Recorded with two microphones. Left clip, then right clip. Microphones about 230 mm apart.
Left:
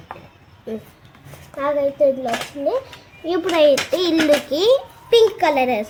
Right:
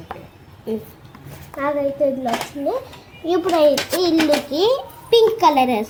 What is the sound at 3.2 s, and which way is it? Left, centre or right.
A child's voice, left.